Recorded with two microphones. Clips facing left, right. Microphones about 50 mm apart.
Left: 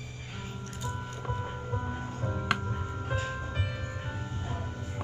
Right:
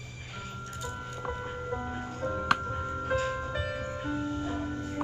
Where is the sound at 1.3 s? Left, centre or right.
Centre.